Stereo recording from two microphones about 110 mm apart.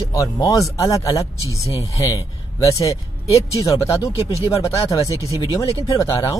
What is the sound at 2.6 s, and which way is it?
Speech, 30° left (ahead or behind).